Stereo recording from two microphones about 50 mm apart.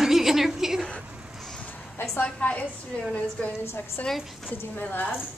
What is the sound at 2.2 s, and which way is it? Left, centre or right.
Speech, left.